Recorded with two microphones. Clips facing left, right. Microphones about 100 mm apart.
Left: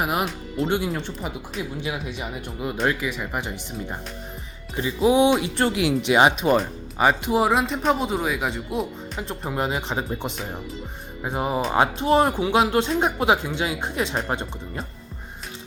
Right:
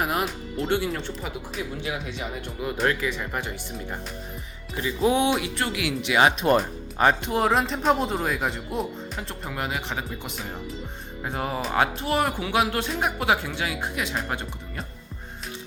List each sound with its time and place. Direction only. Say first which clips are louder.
0.0 s speech: left 1 dB; 15° left (ahead or behind)
4.9 s speech: left 4 dB; 15° left (ahead or behind)
5.5 s speech: left 6 dB; 30° left (ahead or behind)
6.4 s speech: left 1 dB; centre (ahead or behind)
9.2 s speech: left 7 dB; 20° left (ahead or behind)